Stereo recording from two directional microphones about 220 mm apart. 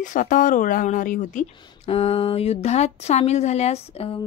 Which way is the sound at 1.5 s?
20° left (ahead or behind).